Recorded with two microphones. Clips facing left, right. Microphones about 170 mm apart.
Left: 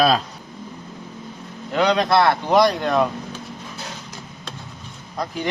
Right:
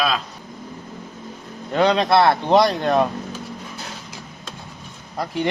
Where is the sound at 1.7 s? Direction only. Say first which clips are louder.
Right 1 dB; 25° right (ahead or behind).